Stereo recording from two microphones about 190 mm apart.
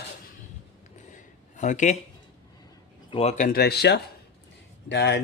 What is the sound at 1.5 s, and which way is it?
Speech, 40° left (ahead or behind).